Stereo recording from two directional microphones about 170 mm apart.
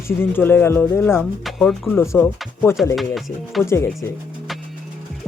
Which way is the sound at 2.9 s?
Centre (ahead or behind).